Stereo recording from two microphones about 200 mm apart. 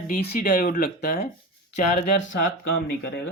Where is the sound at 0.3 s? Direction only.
40° left (ahead or behind).